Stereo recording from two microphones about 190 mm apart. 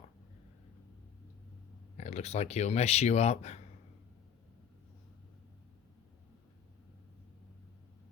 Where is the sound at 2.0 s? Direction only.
35° left (ahead or behind).